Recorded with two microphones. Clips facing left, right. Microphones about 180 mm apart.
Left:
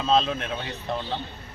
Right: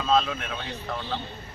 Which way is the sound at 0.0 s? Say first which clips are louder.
Left 1 dB; 25° left (ahead or behind).